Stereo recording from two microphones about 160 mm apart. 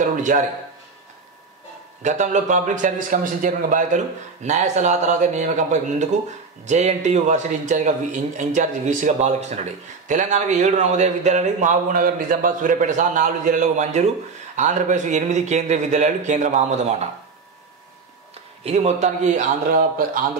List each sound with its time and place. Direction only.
0.0 s a sound: 50° right (ahead or behind)
2.0 s speech: 50° right (ahead or behind)
18.6 s speech: 40° right (ahead or behind)